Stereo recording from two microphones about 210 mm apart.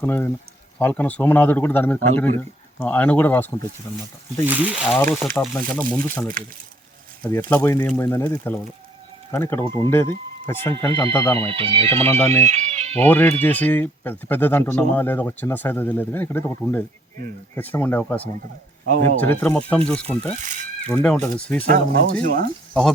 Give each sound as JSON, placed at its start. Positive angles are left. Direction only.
{"t": 0.0, "sound": "speech", "side_deg": 10}
{"t": 4.4, "sound": "speech", "side_deg": -10}
{"t": 11.3, "sound": "speech", "side_deg": -25}
{"t": 12.0, "sound": "speech", "side_deg": 10}
{"t": 12.4, "sound": "speech", "side_deg": -35}
{"t": 13.1, "sound": "speech", "side_deg": 5}
{"t": 20.4, "sound": "a sound", "side_deg": -35}
{"t": 20.8, "sound": "speech", "side_deg": 5}
{"t": 21.7, "sound": "speech", "side_deg": -45}